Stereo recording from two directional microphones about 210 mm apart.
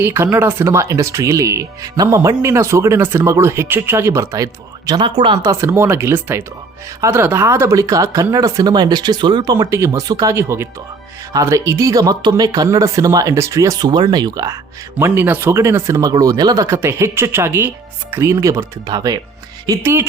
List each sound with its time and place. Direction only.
0.0 s speech: 10° right (ahead or behind)